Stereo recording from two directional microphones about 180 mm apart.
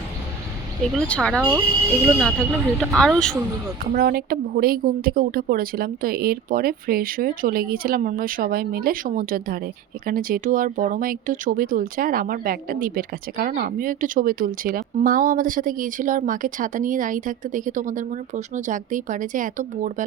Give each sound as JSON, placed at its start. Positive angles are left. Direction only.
{"t": 0.9, "sound": "speech", "side_deg": 5}
{"t": 3.9, "sound": "a woman's voice", "side_deg": -55}